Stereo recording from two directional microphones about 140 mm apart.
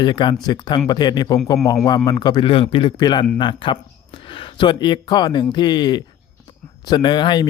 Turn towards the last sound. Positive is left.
turn(degrees=35)  # may be behind; listen again after turning